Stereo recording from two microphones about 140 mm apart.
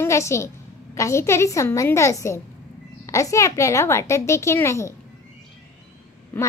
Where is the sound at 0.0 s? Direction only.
20° left (ahead or behind).